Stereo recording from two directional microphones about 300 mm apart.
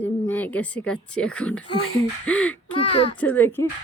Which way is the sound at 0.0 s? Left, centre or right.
Centre.